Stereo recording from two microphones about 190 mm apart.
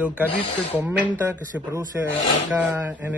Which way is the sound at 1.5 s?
10° right (ahead or behind).